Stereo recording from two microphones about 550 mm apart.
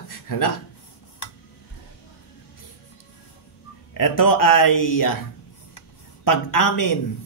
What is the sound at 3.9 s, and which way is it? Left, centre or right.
A man's voice, left.